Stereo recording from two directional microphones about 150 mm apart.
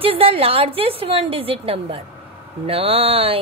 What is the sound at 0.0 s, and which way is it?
A woman's voice, 40° right (ahead or behind).